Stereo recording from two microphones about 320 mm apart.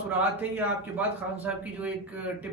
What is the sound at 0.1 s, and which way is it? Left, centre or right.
A man's voice, centre.